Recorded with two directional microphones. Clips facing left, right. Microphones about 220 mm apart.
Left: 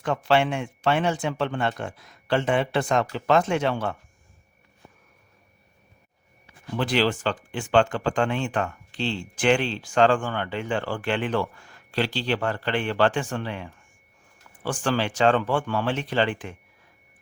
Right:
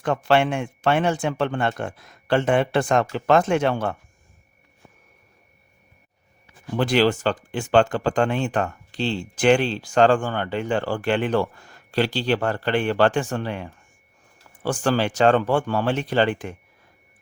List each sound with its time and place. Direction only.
0.0 s speech: 50° right (ahead or behind)
6.7 s speech: 45° right (ahead or behind)